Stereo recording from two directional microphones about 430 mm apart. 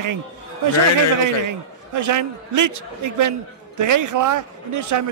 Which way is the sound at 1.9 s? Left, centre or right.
Right.